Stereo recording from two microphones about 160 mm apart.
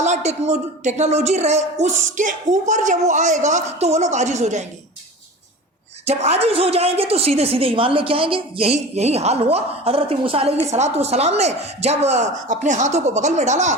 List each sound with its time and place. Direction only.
0.0 s a woman's voice: 45° right (ahead or behind)
6.1 s a woman's voice: 40° right (ahead or behind)